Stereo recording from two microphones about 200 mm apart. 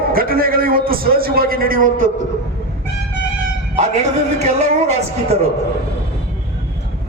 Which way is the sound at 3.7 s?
35° right (ahead or behind).